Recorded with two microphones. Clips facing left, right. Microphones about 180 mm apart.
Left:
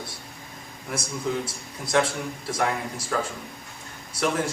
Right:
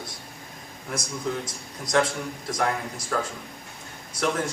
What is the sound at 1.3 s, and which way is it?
A man's voice, 5° left (ahead or behind).